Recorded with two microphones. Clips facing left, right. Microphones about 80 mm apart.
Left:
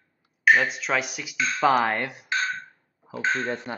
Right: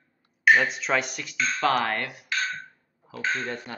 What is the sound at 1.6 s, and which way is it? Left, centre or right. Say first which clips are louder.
Speech: left 4 dB; centre.